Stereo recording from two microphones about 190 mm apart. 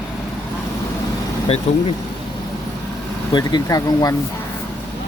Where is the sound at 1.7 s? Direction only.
35° left (ahead or behind).